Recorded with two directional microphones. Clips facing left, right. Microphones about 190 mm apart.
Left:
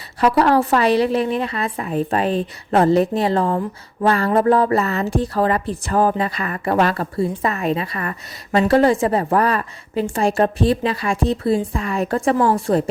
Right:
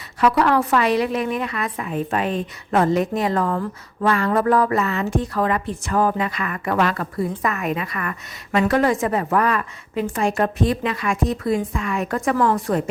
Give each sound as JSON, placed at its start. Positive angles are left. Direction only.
{"t": 0.2, "sound": "a woman's voice", "side_deg": 30}